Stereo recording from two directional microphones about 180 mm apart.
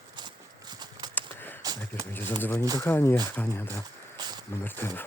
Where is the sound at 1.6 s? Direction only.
20° right (ahead or behind).